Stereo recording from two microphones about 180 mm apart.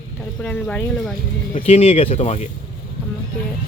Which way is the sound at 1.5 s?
35° left (ahead or behind).